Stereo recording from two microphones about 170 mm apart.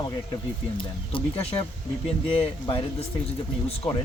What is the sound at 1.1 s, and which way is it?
Speech, 30° left (ahead or behind).